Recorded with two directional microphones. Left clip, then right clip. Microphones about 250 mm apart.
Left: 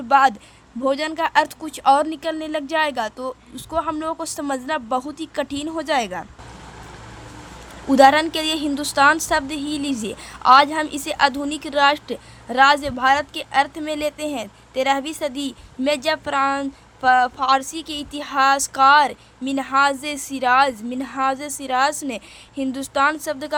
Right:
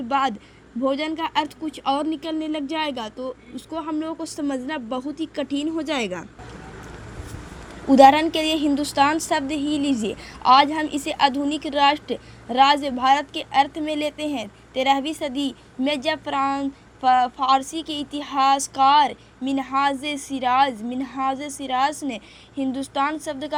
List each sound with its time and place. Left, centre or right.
0.1 s a woman's voice: centre
7.9 s a woman's voice: centre